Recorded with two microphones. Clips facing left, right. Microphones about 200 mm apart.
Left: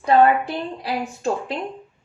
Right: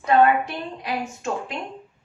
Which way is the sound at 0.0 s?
30° left (ahead or behind).